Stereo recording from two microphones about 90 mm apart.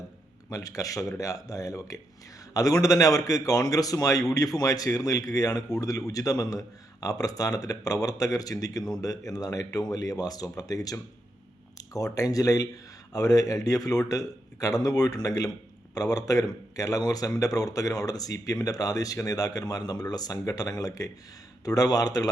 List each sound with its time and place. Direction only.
0.5 s speech: 40° left (ahead or behind)
11.9 s a man's voice: 40° left (ahead or behind)